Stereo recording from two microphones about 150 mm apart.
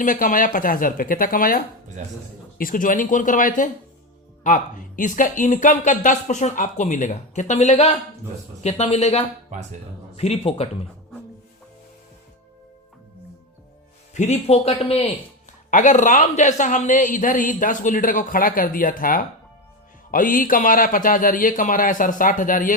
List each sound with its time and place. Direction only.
0.0 s a woman's voice: 60° left (ahead or behind); by 10.7 s 45° left (ahead or behind)
14.1 s speech: 50° left (ahead or behind)
15.7 s a woman's voice: 55° left (ahead or behind)